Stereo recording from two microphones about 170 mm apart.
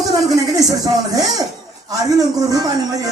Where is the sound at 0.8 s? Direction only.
20° right (ahead or behind).